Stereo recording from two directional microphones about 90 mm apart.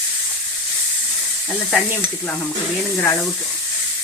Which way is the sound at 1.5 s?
10° left (ahead or behind).